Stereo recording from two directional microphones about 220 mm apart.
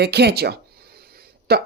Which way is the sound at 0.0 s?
50° right (ahead or behind).